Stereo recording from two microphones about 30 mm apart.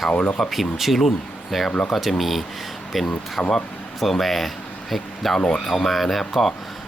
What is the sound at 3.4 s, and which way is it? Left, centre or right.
Speech, left.